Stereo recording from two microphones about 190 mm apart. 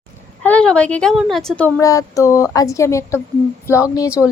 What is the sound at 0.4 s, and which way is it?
A woman's voice, 5° left (ahead or behind).